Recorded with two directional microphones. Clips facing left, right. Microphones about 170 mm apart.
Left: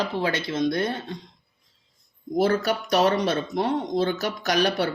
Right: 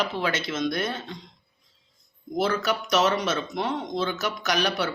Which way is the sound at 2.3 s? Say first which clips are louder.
Left 3 dB; 40° left (ahead or behind).